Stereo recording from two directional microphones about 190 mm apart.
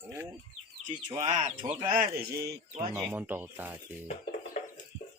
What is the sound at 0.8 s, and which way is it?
Speech, 40° right (ahead or behind).